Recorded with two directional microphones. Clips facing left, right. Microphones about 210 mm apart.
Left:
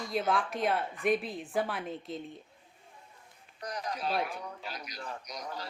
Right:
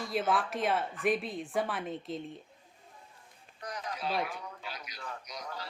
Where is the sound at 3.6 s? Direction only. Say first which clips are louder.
Left 2 dB; 35° left (ahead or behind).